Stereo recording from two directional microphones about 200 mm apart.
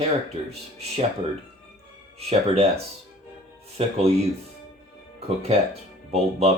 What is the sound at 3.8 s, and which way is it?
Speech, 30° right (ahead or behind).